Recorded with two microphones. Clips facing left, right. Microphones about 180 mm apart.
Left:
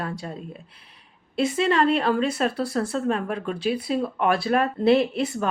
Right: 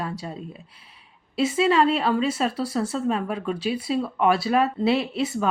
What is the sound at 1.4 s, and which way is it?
Speech, 5° right (ahead or behind).